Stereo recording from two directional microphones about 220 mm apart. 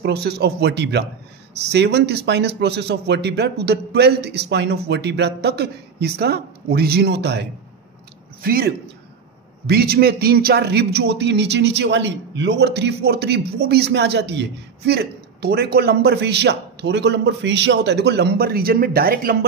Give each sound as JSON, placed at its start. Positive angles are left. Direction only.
{"t": 0.0, "sound": "a man's voice", "side_deg": -45}